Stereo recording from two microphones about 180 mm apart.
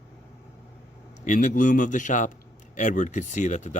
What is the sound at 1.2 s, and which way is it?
Speech, 45° left (ahead or behind).